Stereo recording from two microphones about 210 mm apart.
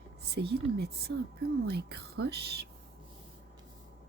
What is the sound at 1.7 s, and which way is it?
Speech, 50° right (ahead or behind).